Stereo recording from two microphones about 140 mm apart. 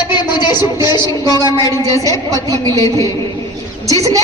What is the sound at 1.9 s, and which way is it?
Speech, 25° left (ahead or behind).